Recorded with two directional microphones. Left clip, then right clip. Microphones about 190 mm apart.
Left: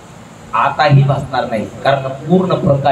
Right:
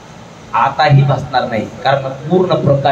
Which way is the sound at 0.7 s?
15° right (ahead or behind).